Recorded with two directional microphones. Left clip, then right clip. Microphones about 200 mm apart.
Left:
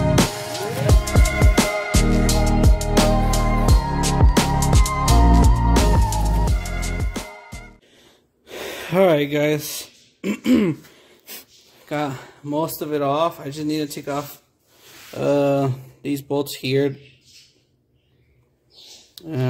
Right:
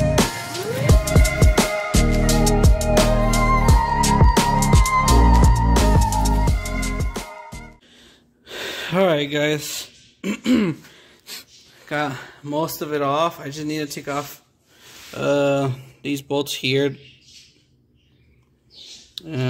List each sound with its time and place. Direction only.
0.1 s music: centre (ahead or behind)
8.5 s a sound: 10° left (ahead or behind)
11.2 s wheeze: 15° left (ahead or behind)
11.9 s speech: centre (ahead or behind)
15.1 s speech: 10° left (ahead or behind)
19.1 s a sound: 5° left (ahead or behind)